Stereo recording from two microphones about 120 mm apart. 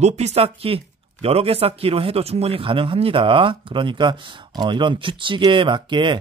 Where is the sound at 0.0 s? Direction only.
65° right (ahead or behind).